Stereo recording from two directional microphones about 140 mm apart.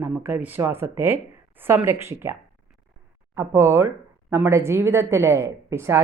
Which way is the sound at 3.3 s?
20° right (ahead or behind).